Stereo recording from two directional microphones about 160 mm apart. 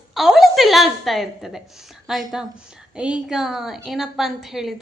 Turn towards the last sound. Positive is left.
turn(degrees=0)  # may be behind; listen again after turning